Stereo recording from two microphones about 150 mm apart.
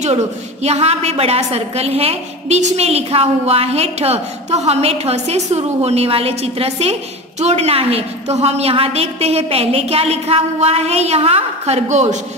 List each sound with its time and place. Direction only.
0.0 s a woman's voice: 45° right (ahead or behind)